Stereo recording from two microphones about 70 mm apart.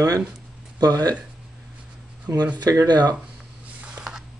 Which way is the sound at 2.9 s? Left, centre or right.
Right.